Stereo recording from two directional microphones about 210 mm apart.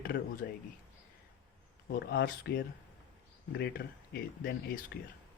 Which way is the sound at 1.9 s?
50° left (ahead or behind).